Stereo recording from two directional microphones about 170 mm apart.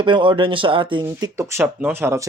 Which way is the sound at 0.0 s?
30° right (ahead or behind).